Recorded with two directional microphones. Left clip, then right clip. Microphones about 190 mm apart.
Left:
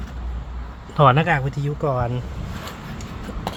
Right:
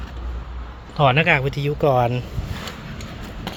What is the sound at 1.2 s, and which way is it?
Speech, 10° right (ahead or behind).